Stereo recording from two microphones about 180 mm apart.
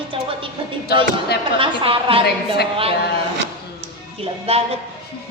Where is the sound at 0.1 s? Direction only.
30° right (ahead or behind).